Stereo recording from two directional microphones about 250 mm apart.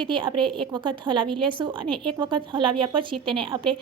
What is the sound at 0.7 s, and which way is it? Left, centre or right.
A woman's voice, centre.